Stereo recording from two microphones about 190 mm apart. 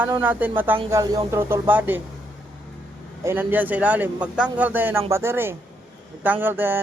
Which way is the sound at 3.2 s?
10° right (ahead or behind).